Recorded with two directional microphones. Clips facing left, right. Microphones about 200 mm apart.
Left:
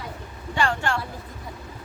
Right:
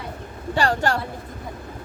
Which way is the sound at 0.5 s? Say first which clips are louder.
Right 3 dB; 40° right (ahead or behind).